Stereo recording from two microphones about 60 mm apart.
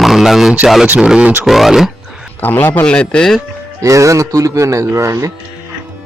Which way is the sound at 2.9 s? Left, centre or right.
Centre.